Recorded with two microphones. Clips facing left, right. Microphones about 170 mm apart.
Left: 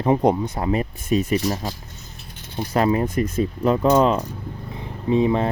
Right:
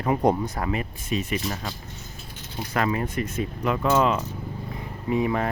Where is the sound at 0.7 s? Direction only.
40° left (ahead or behind).